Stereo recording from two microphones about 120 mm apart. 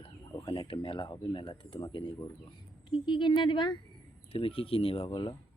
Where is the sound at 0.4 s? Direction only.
45° left (ahead or behind).